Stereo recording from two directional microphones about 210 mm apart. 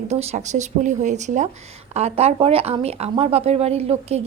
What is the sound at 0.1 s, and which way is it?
Speech, 30° right (ahead or behind).